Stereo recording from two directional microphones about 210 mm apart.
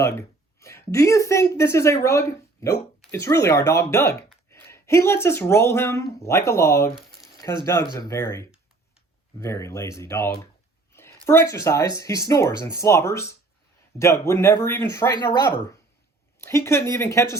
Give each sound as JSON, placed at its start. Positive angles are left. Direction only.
{"t": 0.0, "sound": "speech", "side_deg": 15}
{"t": 10.9, "sound": "a sound", "side_deg": 10}
{"t": 11.3, "sound": "speech", "side_deg": 15}